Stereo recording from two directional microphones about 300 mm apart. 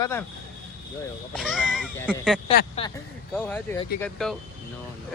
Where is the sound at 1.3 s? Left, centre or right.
Centre.